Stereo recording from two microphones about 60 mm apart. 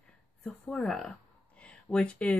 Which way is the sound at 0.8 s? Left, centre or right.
Centre.